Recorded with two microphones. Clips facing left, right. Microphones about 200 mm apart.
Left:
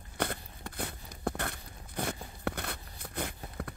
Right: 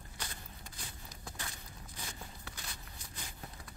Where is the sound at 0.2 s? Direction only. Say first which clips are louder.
Left 15 dB; 60° left (ahead or behind).